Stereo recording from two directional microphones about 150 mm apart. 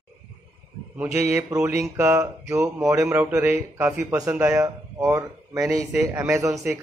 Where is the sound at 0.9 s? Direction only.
15° right (ahead or behind).